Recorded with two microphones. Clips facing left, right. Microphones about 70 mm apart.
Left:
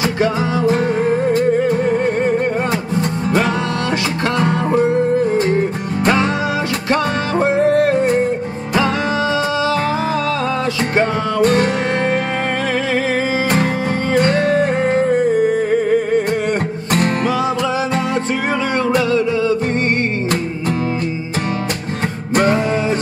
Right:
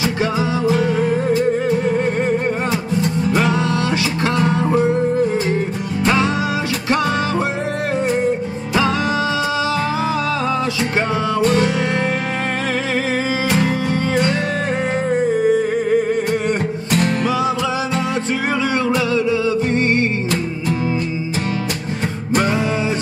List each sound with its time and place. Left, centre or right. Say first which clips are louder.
0.0 s music: left 2 dB; left
6.0 s music: left 1 dB; left
11.0 s music: left 3 dB; left
14.1 s music: left 9 dB; left
18.9 s music: left 4 dB; left
22.3 s music: left 3 dB; left